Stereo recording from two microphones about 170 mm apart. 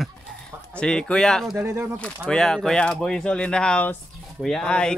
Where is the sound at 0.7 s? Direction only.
5° left (ahead or behind).